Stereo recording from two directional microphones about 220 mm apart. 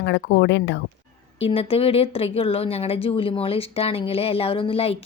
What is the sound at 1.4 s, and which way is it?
Speech, 25° left (ahead or behind).